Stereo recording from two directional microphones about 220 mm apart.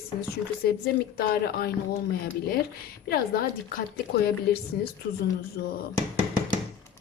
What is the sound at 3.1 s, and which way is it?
Speech, 45° left (ahead or behind).